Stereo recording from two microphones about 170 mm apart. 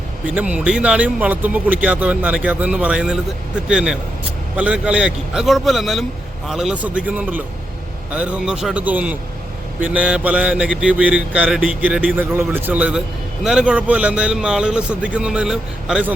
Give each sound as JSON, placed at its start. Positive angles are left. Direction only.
{"t": 0.3, "sound": "a man's voice", "side_deg": -5}